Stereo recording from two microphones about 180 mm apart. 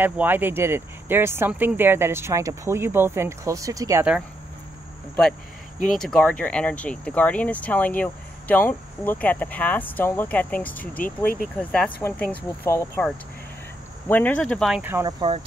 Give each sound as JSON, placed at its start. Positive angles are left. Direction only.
{"t": 0.0, "sound": "speech", "side_deg": -10}
{"t": 5.9, "sound": "speech", "side_deg": 5}
{"t": 14.0, "sound": "speech", "side_deg": 10}
{"t": 14.8, "sound": "speech", "side_deg": -10}
{"t": 15.0, "sound": "cricket", "side_deg": -25}